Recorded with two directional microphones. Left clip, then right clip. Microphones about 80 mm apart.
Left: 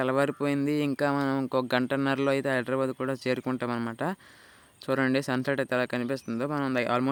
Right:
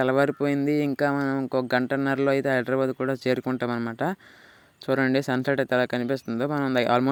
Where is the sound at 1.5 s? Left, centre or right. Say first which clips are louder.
Right 4 dB; right.